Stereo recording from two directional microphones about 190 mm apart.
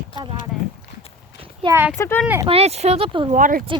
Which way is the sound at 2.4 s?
30° right (ahead or behind).